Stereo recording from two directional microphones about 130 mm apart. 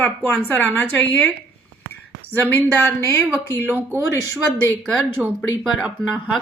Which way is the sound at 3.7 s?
15° right (ahead or behind).